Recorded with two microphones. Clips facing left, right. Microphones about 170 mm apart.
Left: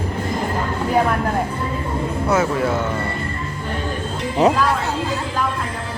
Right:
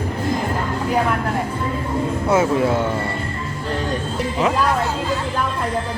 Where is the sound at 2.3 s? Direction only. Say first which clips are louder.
Right 2 dB; 25° right (ahead or behind).